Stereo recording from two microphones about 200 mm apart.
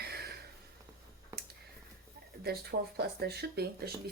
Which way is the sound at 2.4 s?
50° right (ahead or behind).